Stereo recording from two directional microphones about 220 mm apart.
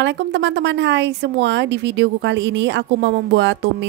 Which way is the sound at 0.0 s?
55° right (ahead or behind).